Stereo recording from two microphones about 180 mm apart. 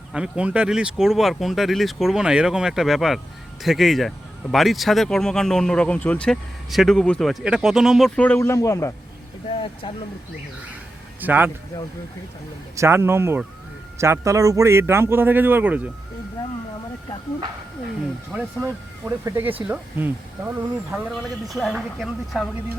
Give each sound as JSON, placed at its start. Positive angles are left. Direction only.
{"t": 0.1, "sound": "speech", "side_deg": -5}
{"t": 9.5, "sound": "vehicle", "side_deg": 30}
{"t": 11.2, "sound": "a man's voice", "side_deg": -10}
{"t": 12.7, "sound": "a man's voice", "side_deg": -15}
{"t": 18.6, "sound": "a man's voice", "side_deg": -15}